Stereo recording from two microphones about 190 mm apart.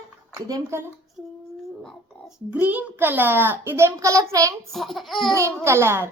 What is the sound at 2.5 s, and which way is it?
A child's voice, 10° right (ahead or behind).